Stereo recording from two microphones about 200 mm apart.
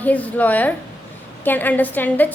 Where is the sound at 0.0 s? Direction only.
10° left (ahead or behind).